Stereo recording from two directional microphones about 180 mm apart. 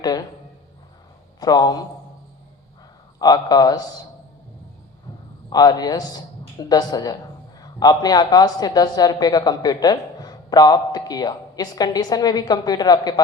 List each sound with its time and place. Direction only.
0.0 s a man's voice: 20° left (ahead or behind)
1.4 s a woman's voice: 20° left (ahead or behind)
3.2 s a woman's voice: 20° left (ahead or behind)
5.5 s a woman's voice: 20° left (ahead or behind)